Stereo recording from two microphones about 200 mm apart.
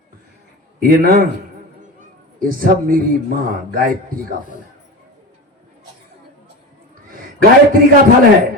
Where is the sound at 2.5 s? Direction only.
45° right (ahead or behind).